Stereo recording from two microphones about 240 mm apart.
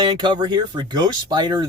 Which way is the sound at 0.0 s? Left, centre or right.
Centre.